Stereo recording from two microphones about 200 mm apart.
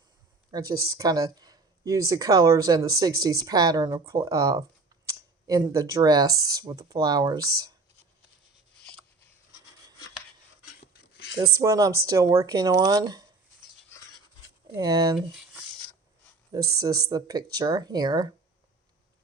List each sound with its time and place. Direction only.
0.5 s speech: 20° right (ahead or behind)
8.9 s a sound: 5° left (ahead or behind)
10.8 s a sound: 50° left (ahead or behind)
11.6 s speech: 15° right (ahead or behind)
14.7 s speech: 20° right (ahead or behind)
16.5 s speech: 15° right (ahead or behind)